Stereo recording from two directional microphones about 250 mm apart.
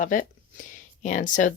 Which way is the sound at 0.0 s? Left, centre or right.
Left.